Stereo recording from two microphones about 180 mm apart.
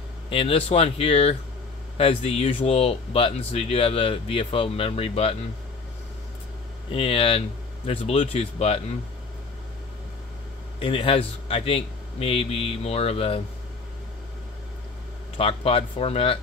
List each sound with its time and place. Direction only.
0.3 s speech: 30° left (ahead or behind)
6.9 s speech: 30° left (ahead or behind)
10.8 s speech: 30° left (ahead or behind)
15.3 s speech: 30° left (ahead or behind)